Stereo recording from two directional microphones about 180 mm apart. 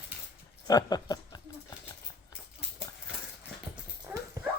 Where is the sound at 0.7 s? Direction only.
20° left (ahead or behind).